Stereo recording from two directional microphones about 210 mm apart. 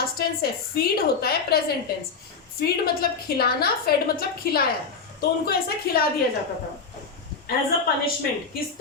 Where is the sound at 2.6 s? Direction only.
45° left (ahead or behind).